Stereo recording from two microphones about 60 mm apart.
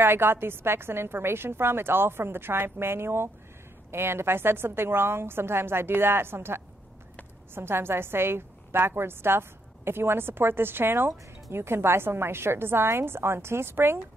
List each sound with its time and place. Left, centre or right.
0.0 s a woman's voice: right